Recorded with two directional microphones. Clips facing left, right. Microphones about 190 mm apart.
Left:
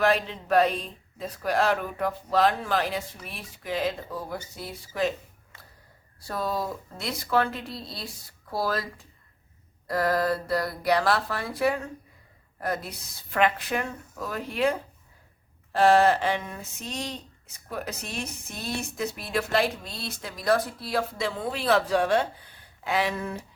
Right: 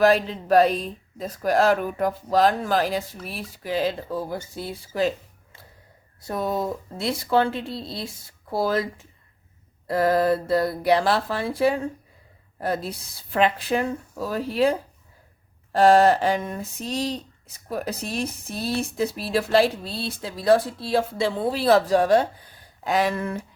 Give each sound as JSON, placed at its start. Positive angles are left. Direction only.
{"t": 0.0, "sound": "speech", "side_deg": -35}
{"t": 6.2, "sound": "speech", "side_deg": -20}